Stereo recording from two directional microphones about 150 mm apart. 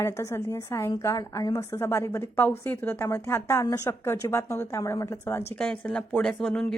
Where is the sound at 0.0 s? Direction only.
20° left (ahead or behind).